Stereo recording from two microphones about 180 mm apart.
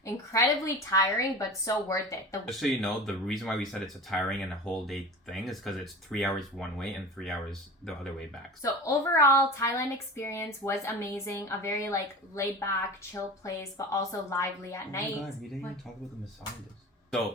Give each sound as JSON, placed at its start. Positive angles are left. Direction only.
{"t": 0.0, "sound": "a woman's voice", "side_deg": 15}
{"t": 2.5, "sound": "speech", "side_deg": 0}
{"t": 8.6, "sound": "a woman's voice", "side_deg": 15}